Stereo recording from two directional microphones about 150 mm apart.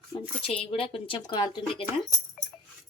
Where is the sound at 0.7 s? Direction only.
40° left (ahead or behind).